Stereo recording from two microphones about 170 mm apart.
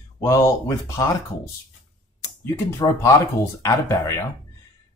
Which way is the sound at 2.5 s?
15° left (ahead or behind).